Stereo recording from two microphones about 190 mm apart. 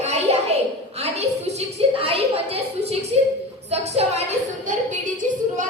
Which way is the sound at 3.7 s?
35° right (ahead or behind).